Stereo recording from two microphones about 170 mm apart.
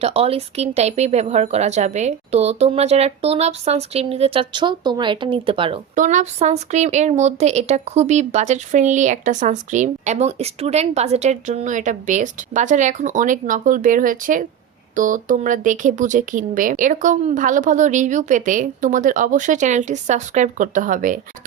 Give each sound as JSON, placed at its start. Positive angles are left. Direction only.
{"t": 0.0, "sound": "speech", "side_deg": -35}
{"t": 5.9, "sound": "speech", "side_deg": -45}